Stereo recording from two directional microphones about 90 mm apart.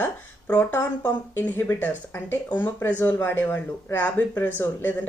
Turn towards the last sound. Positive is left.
turn(degrees=20)  # may be behind; listen again after turning